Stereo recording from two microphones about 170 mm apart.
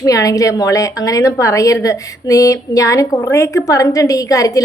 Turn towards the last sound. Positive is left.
turn(degrees=20)  # may be behind; listen again after turning